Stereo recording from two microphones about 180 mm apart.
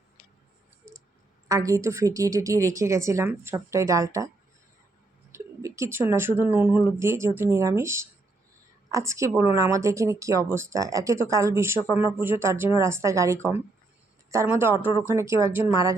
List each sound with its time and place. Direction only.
1.5 s speech: 20° right (ahead or behind)
5.3 s speech: 15° right (ahead or behind)